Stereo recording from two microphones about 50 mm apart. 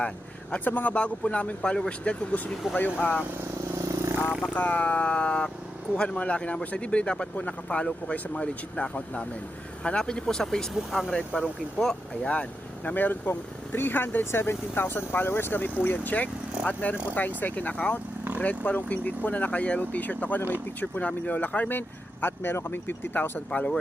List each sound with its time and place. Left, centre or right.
0.5 s speech: left
0.9 s speech: left
3.7 s vehicle: right
4.4 s speech: left; by 12.3 s centre
12.3 s speech: left
23.5 s speech: left